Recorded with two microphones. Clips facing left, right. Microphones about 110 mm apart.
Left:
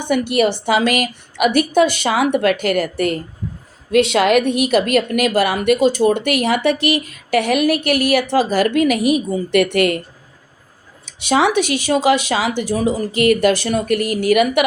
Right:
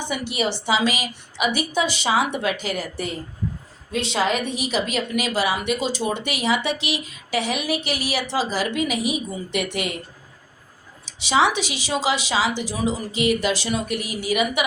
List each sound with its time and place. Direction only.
0.0 s a woman's voice: 55° left (ahead or behind)
11.0 s a woman's voice: 55° left (ahead or behind)